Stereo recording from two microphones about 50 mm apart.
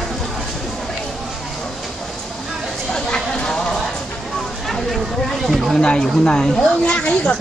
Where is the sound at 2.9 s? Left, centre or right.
Centre.